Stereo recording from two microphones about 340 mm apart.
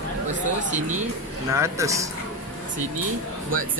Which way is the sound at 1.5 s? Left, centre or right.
Centre.